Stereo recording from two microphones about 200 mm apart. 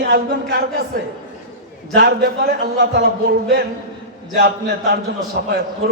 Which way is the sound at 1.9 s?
50° right (ahead or behind).